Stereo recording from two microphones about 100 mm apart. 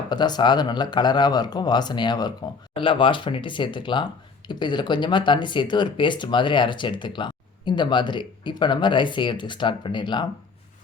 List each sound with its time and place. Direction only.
0.1 s speech: 45° left (ahead or behind)
2.7 s speech: 55° left (ahead or behind)